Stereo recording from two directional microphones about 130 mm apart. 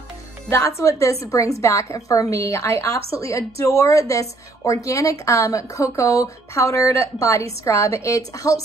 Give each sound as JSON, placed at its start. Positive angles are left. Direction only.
{"t": 0.5, "sound": "speech", "side_deg": 20}